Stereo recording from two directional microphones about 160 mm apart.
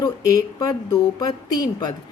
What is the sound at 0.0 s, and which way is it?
A woman's voice, 25° left (ahead or behind).